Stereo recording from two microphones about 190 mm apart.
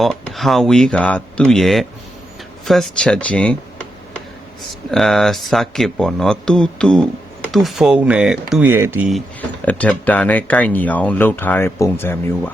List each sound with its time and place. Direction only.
0.0 s speech: centre (ahead or behind)
4.9 s speech: centre (ahead or behind)
9.6 s speech: 10° left (ahead or behind)